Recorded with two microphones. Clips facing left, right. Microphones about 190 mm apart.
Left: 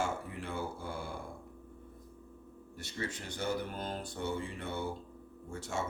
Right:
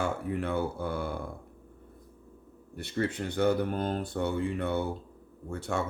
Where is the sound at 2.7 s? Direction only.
60° right (ahead or behind).